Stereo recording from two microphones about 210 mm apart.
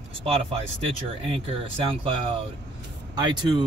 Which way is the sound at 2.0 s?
25° right (ahead or behind).